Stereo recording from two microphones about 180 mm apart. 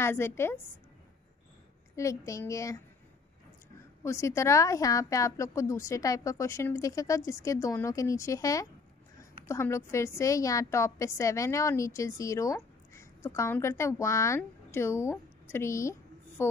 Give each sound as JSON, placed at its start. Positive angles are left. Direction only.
{"t": 0.0, "sound": "a woman's voice", "side_deg": 15}
{"t": 2.0, "sound": "a woman's voice", "side_deg": 15}
{"t": 4.0, "sound": "a woman's voice", "side_deg": 15}